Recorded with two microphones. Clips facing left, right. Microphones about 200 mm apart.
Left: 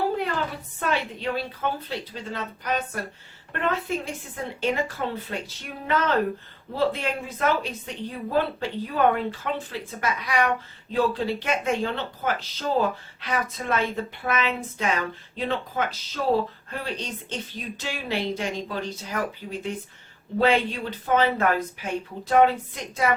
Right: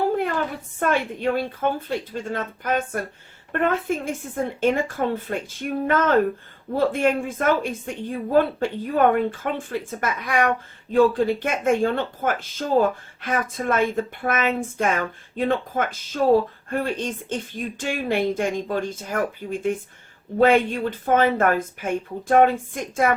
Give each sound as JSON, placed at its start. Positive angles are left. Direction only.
{"t": 0.8, "sound": "speech", "side_deg": -50}